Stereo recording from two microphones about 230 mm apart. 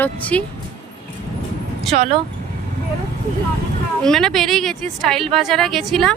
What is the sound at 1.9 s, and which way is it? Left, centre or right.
Speech, right.